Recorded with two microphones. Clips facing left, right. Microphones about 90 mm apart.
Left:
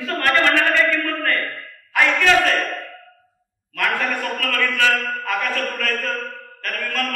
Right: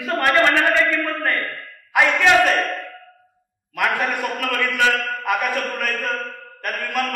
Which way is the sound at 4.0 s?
15° right (ahead or behind).